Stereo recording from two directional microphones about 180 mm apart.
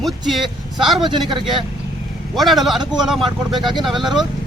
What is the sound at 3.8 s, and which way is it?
Speech, centre (ahead or behind).